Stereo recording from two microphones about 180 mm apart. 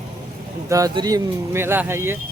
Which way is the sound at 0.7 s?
20° right (ahead or behind).